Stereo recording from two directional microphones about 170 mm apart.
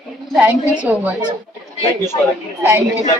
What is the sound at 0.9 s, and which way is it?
Speech, 10° right (ahead or behind).